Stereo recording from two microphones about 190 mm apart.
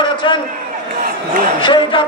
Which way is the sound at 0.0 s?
25° left (ahead or behind).